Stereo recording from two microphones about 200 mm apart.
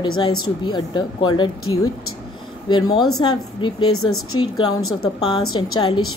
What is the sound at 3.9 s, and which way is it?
Speech, 90° left.